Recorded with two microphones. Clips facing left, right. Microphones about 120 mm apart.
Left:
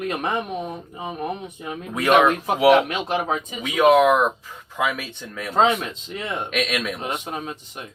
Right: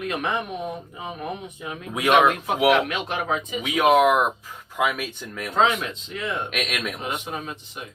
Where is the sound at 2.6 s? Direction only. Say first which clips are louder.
Left 4 dB; 40° left (ahead or behind).